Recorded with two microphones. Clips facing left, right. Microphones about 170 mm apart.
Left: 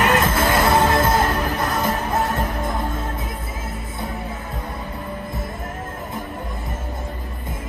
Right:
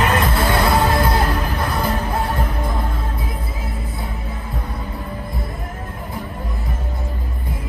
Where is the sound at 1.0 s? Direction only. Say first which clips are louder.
Left 1 dB; 45° left (ahead or behind).